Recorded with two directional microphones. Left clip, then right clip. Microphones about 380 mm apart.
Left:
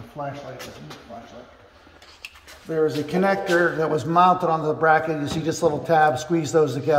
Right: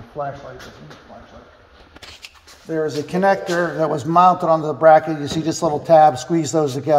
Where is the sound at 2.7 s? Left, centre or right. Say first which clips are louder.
Even; centre.